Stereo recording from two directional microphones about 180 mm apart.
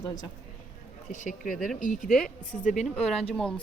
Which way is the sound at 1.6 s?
45° left (ahead or behind).